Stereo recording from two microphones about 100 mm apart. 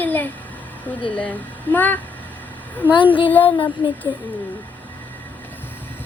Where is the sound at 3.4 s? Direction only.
55° left (ahead or behind).